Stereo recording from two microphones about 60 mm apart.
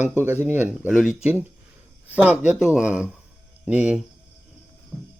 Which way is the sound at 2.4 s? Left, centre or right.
Centre.